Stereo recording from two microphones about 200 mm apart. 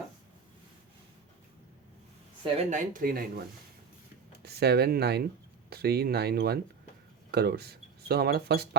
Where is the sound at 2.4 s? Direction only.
35° right (ahead or behind).